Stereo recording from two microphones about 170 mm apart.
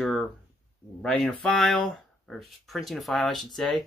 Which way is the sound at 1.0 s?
5° left (ahead or behind).